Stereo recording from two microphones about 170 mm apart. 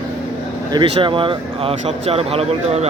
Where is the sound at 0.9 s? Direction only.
30° right (ahead or behind).